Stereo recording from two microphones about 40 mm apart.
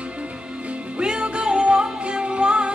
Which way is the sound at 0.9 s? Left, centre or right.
Right.